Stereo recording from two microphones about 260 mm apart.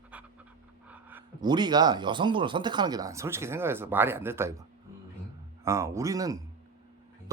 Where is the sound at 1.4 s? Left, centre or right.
Centre.